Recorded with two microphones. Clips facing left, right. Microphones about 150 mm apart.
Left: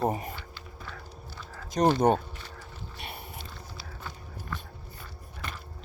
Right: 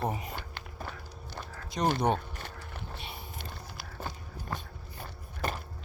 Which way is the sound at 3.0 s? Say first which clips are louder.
Left 2 dB; 60° left (ahead or behind).